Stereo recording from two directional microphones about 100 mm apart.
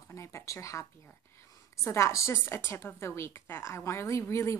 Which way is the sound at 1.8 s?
30° left (ahead or behind).